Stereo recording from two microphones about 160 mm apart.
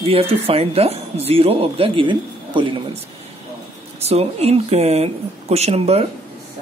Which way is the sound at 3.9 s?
40° right (ahead or behind).